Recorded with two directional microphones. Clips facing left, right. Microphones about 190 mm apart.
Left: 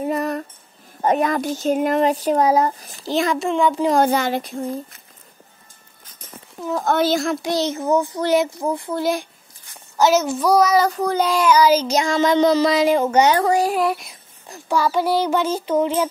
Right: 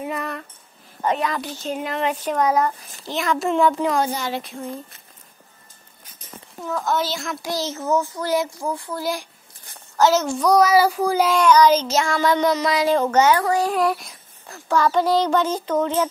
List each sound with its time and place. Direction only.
0.0 s music: 40° left (ahead or behind)
1.0 s a child's voice: 45° left (ahead or behind)
3.3 s a child's voice: centre (ahead or behind)
3.9 s speech: 55° left (ahead or behind)
4.4 s a child's voice: 40° left (ahead or behind)
6.8 s a woman's voice: 55° left (ahead or behind)
7.4 s a child's voice: 20° left (ahead or behind)
9.9 s child singing: 10° left (ahead or behind)
12.9 s child singing: 10° left (ahead or behind)
13.7 s a child's voice: centre (ahead or behind)
14.5 s child singing: 10° left (ahead or behind)